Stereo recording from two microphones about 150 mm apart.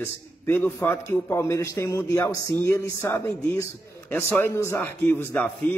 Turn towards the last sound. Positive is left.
turn(degrees=15)  # may be behind; listen again after turning